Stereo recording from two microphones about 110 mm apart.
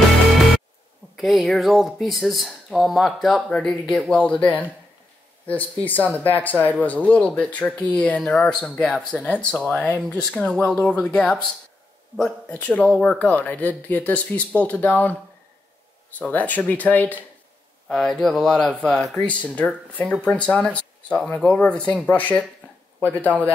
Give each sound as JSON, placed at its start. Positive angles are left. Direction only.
{"t": 1.1, "sound": "speech", "side_deg": 0}
{"t": 12.2, "sound": "speech", "side_deg": 10}
{"t": 16.2, "sound": "speech", "side_deg": 15}
{"t": 19.2, "sound": "speech", "side_deg": 15}
{"t": 20.7, "sound": "a sound", "side_deg": 10}
{"t": 21.4, "sound": "speech", "side_deg": 10}